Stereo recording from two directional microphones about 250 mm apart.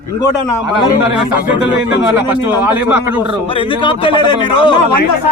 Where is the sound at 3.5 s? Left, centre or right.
Centre.